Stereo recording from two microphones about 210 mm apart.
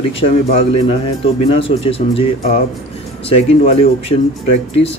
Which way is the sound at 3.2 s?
30° left (ahead or behind).